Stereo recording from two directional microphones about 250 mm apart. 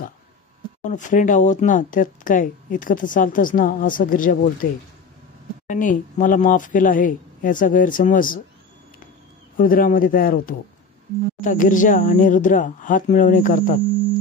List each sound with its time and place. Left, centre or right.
0.8 s speech: left
5.7 s speech: left
9.6 s speech: left